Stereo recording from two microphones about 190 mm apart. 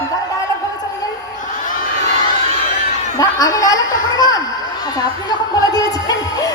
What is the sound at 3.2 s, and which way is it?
A woman's voice, 20° left (ahead or behind).